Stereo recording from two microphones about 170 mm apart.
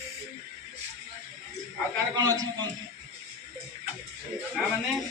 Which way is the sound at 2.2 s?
20° right (ahead or behind).